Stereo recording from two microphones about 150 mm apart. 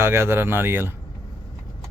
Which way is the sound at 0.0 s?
15° right (ahead or behind).